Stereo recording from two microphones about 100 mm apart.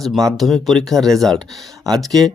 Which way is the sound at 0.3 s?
Centre (ahead or behind).